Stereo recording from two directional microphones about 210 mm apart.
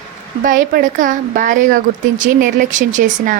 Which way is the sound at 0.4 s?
40° right (ahead or behind).